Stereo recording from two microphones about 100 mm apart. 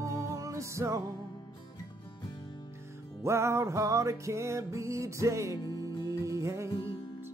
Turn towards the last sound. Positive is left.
turn(degrees=-30)  # may be behind; listen again after turning